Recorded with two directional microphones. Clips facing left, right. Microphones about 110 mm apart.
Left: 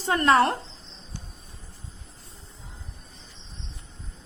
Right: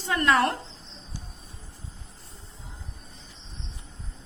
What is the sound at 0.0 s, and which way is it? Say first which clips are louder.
Speech: left 3 dB; 40° left (ahead or behind).